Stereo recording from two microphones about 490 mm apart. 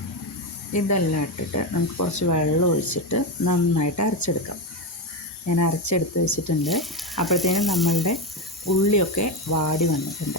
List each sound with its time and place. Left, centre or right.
0.7 s speech: left
5.5 s speech: left
6.6 s speech: centre
8.6 s speech: left